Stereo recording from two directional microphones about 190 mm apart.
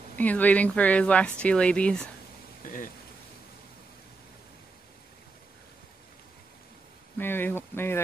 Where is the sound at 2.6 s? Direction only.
45° left (ahead or behind).